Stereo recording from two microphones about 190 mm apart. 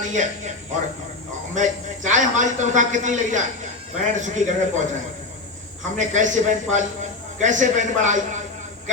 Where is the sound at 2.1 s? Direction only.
40° right (ahead or behind).